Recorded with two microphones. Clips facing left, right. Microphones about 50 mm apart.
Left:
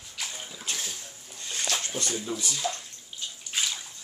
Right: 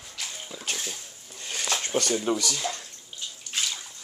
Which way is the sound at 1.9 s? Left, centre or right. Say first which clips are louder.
Right 7 dB; right.